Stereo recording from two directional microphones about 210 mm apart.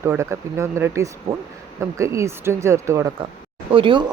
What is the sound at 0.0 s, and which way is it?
A woman's voice, 15° right (ahead or behind).